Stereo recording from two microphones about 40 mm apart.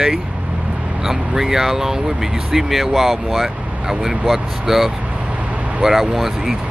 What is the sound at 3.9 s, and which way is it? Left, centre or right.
Speech, centre.